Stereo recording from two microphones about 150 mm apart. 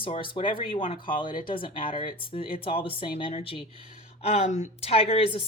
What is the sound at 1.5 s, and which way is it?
A woman's voice, 35° left (ahead or behind).